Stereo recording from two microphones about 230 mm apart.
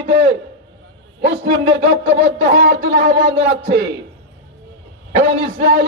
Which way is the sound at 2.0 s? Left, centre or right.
Right.